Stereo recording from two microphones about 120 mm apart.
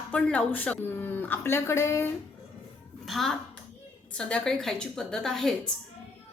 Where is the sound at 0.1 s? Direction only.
10° left (ahead or behind).